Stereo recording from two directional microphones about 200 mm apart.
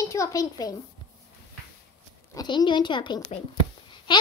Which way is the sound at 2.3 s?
20° left (ahead or behind).